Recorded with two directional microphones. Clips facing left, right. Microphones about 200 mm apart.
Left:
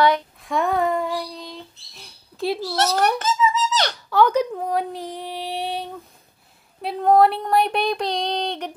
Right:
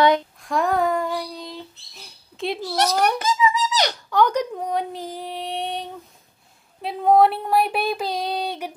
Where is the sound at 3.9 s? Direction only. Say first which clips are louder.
Left 4 dB; 5° left (ahead or behind).